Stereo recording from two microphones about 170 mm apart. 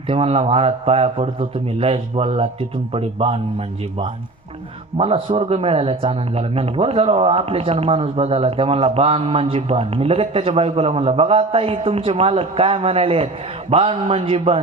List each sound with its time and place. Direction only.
0.1 s a man's voice: 35° right (ahead or behind)
4.9 s a man's voice: 30° right (ahead or behind)